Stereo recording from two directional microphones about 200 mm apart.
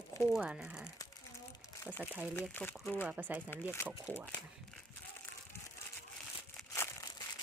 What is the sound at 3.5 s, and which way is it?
Speech, 10° left (ahead or behind).